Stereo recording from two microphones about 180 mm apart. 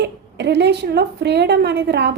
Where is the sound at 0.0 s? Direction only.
70° right (ahead or behind).